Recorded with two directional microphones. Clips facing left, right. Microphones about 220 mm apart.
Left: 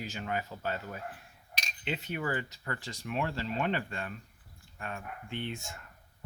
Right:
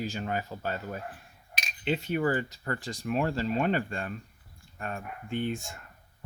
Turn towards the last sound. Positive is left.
turn(degrees=-35)  # may be behind; listen again after turning